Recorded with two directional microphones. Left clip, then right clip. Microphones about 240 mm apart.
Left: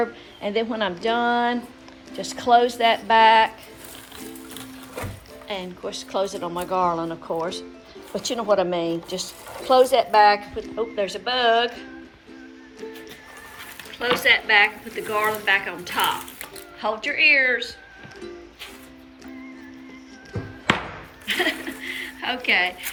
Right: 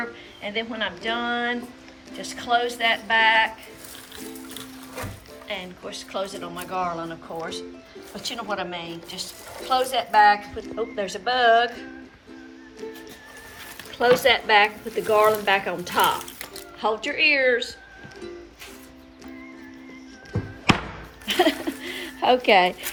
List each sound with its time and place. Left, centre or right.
0.4 s a woman's voice: centre
5.5 s speech: centre
14.0 s speech: centre
20.3 s music: centre
21.2 s zipper: centre